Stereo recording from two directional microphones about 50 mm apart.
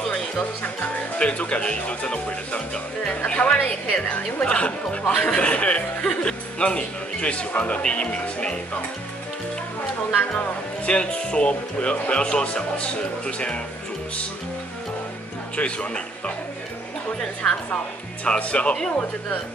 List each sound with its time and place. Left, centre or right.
0.6 s a woman's voice: left
10.9 s a woman's voice: centre
15.5 s a woman's voice: left
17.4 s speech: centre
18.2 s a woman's voice: left